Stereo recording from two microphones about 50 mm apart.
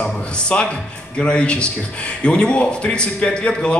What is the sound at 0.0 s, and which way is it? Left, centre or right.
Music, centre.